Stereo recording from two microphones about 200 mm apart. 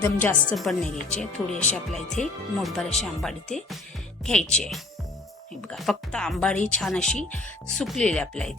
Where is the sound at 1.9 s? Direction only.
Centre (ahead or behind).